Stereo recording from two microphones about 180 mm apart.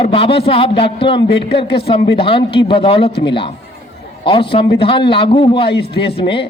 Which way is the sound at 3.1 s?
70° left (ahead or behind).